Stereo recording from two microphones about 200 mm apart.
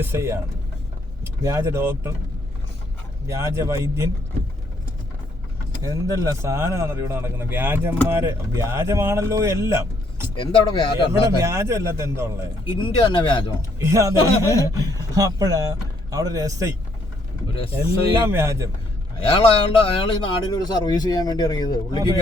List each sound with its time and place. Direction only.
0.0 s speech: 15° right (ahead or behind)
3.2 s speech: 15° right (ahead or behind)
5.8 s speech: 15° right (ahead or behind)
10.3 s speech: 25° left (ahead or behind)
11.2 s speech: 15° right (ahead or behind)
12.6 s speech: 25° left (ahead or behind)
13.7 s speech: 15° right (ahead or behind)
17.5 s speech: 30° left (ahead or behind)
18.2 s speech: 15° right (ahead or behind)
19.2 s speech: 25° left (ahead or behind)